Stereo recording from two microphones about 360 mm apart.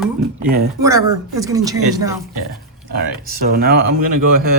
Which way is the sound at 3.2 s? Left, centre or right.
Right.